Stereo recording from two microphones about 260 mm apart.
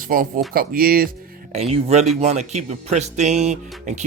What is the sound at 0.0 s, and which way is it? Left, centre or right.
Speech, right.